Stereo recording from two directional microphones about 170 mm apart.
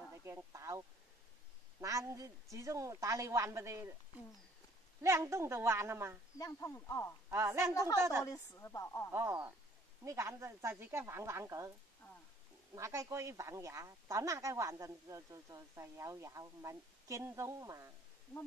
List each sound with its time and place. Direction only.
0.2 s a woman's voice: 15° right (ahead or behind)
5.0 s speech: 15° right (ahead or behind)
6.3 s speech: 20° left (ahead or behind)
7.2 s speech: 15° right (ahead or behind)
7.7 s a woman's voice: 20° left (ahead or behind)
9.1 s speech: 15° right (ahead or behind)
12.7 s speech: 20° right (ahead or behind)